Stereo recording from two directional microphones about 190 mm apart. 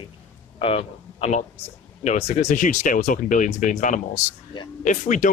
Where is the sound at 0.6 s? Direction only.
30° left (ahead or behind).